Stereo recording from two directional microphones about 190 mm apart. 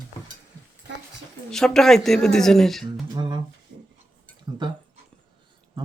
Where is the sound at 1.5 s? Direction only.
Centre (ahead or behind).